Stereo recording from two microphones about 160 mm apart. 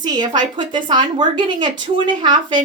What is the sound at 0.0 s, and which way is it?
A woman's voice, 25° right (ahead or behind).